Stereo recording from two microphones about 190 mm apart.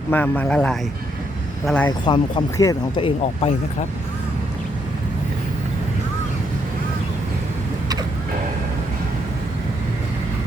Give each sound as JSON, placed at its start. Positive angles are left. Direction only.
{"t": 0.1, "sound": "a man's voice", "side_deg": 10}
{"t": 2.0, "sound": "speech", "side_deg": 25}